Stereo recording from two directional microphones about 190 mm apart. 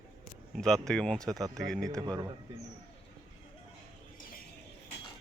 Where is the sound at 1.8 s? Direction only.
20° right (ahead or behind).